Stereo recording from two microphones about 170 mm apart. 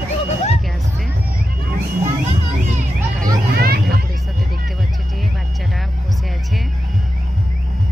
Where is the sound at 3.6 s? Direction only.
65° right (ahead or behind).